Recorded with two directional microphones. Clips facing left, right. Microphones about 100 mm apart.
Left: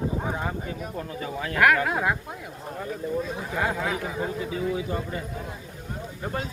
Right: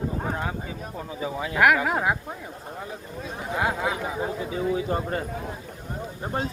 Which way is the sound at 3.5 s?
15° right (ahead or behind).